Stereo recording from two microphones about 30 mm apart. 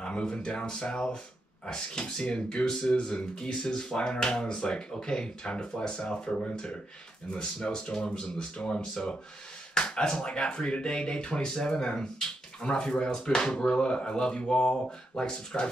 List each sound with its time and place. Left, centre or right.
0.0 s speech: left
2.2 s speech: left
2.8 s speech: left
9.8 s speech: left
12.5 s speech: left